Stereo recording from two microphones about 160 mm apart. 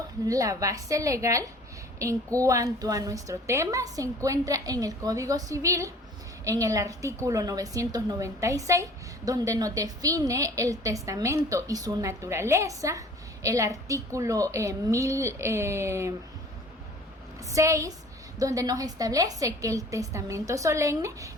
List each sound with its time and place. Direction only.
0.3 s a woman's voice: 20° right (ahead or behind)
17.5 s a woman's voice: 20° right (ahead or behind)